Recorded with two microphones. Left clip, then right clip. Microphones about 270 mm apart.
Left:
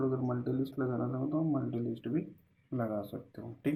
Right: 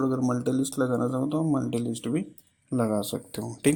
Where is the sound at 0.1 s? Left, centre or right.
Right.